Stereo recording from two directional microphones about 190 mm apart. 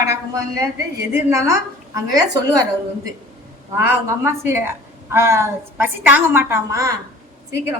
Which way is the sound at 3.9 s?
15° right (ahead or behind).